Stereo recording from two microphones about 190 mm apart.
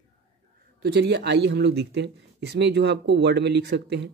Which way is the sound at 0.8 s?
60° right (ahead or behind).